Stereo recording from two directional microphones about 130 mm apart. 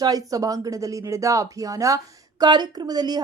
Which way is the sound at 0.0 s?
25° right (ahead or behind).